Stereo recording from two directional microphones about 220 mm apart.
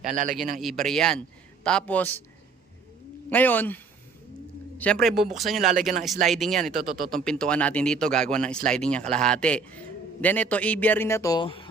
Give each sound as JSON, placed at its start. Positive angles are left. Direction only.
{"t": 0.0, "sound": "a man's voice", "side_deg": -35}
{"t": 0.6, "sound": "a man's voice", "side_deg": 0}
{"t": 3.2, "sound": "a man's voice", "side_deg": 10}
{"t": 4.8, "sound": "speech", "side_deg": 5}